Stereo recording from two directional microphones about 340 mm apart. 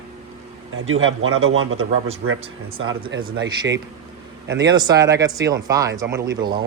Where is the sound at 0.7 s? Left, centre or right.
Right.